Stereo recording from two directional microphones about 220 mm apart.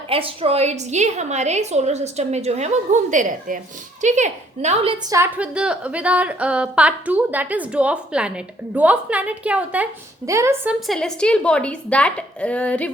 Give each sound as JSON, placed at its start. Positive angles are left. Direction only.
{"t": 0.1, "sound": "a woman's voice", "side_deg": -25}
{"t": 5.1, "sound": "a woman's voice", "side_deg": -10}